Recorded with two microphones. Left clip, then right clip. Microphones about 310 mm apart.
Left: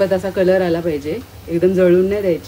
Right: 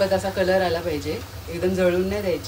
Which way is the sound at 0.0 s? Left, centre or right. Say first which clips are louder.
Left 5 dB; left.